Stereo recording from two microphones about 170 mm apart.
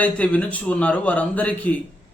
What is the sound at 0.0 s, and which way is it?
A man's voice, 10° left (ahead or behind).